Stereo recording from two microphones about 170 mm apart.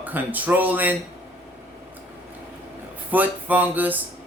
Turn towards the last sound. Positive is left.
turn(degrees=-10)  # may be behind; listen again after turning